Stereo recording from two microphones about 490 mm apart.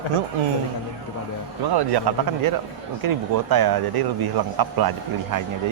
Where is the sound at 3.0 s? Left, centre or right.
Right.